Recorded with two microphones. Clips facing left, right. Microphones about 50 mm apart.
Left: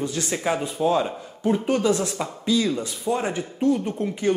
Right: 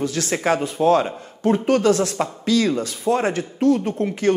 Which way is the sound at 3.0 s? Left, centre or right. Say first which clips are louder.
Right 5 dB; right.